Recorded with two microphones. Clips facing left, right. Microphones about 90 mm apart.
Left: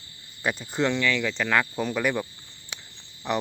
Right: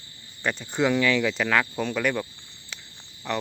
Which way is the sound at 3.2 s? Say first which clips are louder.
Left 2 dB; 15° left (ahead or behind).